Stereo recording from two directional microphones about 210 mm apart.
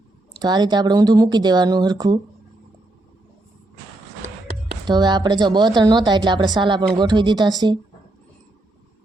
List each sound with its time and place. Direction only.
0.3 s a woman's voice: 20° right (ahead or behind)
4.9 s a woman's voice: 20° right (ahead or behind)